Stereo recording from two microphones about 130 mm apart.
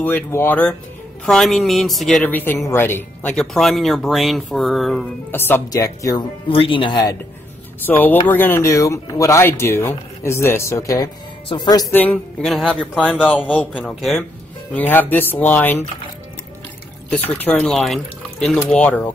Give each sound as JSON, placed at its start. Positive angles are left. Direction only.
{"t": 0.0, "sound": "speech", "side_deg": 15}
{"t": 2.2, "sound": "speech", "side_deg": 15}
{"t": 3.3, "sound": "speech", "side_deg": 0}
{"t": 5.3, "sound": "speech", "side_deg": 15}
{"t": 6.5, "sound": "speech", "side_deg": 40}
{"t": 7.8, "sound": "speech", "side_deg": 15}
{"t": 11.4, "sound": "speech", "side_deg": 35}
{"t": 11.9, "sound": "speech", "side_deg": 10}
{"t": 12.6, "sound": "speech", "side_deg": -10}
{"t": 13.6, "sound": "speech", "side_deg": 10}
{"t": 17.1, "sound": "speech", "side_deg": 10}
{"t": 17.7, "sound": "speech", "side_deg": 0}